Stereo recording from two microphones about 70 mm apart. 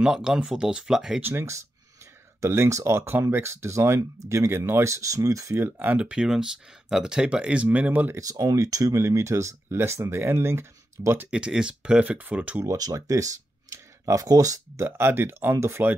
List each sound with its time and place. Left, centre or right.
0.0 s speech: centre
1.2 s speech: right
3.1 s speech: right
4.9 s speech: right
5.8 s speech: right
8.2 s speech: right
11.2 s speech: centre
12.6 s speech: right
14.9 s speech: right